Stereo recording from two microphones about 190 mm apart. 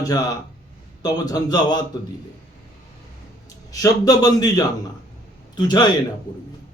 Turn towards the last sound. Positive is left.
turn(degrees=20)  # may be behind; listen again after turning